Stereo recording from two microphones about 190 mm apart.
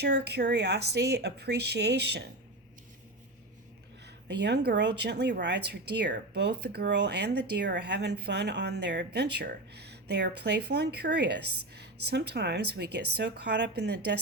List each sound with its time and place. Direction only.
0.0 s speech: 60° right (ahead or behind)
4.0 s speech: 65° right (ahead or behind)